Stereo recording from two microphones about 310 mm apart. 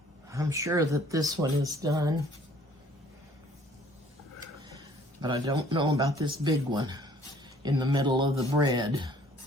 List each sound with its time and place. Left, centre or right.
0.3 s speech: centre
5.2 s speech: centre